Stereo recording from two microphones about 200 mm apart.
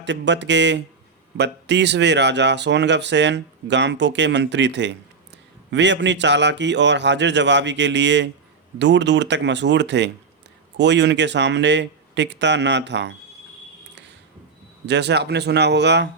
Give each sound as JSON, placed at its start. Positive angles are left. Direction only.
{"t": 0.0, "sound": "speech", "side_deg": -60}
{"t": 14.8, "sound": "speech", "side_deg": -60}